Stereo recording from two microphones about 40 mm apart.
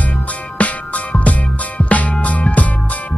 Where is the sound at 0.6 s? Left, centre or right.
Left.